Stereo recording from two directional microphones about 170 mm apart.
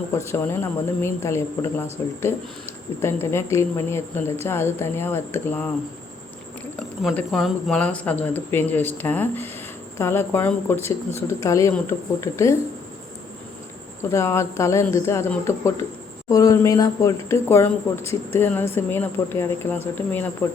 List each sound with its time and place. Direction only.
0.1 s speech: 15° left (ahead or behind)
7.1 s speech: 5° left (ahead or behind)
14.0 s speech: 15° left (ahead or behind)